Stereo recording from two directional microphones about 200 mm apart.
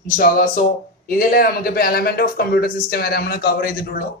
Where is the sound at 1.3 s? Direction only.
50° left (ahead or behind).